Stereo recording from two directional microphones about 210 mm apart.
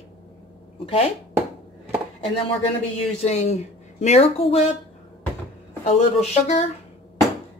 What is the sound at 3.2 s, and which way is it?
A woman's voice, 30° left (ahead or behind).